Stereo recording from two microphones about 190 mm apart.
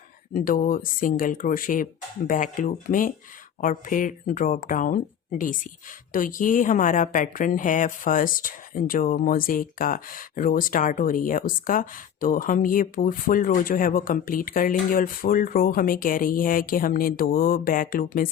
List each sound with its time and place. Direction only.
0.3 s a woman's voice: 45° left (ahead or behind)